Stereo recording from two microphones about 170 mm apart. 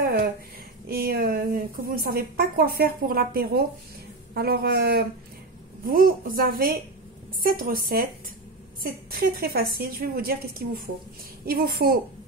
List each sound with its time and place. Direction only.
0.0 s a sound: 65° right (ahead or behind)
0.8 s a woman's voice: 65° right (ahead or behind)
5.9 s a woman's voice: 55° right (ahead or behind)